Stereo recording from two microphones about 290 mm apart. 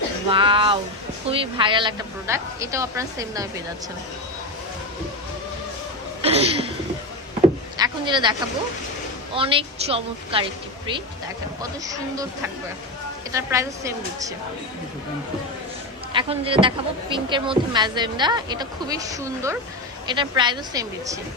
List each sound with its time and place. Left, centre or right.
0.3 s speech: centre
6.2 s speech: right
7.8 s speech: centre
11.6 s speech: centre
13.3 s speech: centre
16.1 s speech: centre